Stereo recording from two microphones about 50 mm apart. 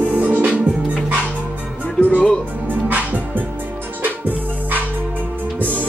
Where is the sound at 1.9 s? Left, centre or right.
Left.